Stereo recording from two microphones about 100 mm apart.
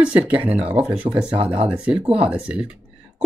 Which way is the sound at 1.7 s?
10° right (ahead or behind).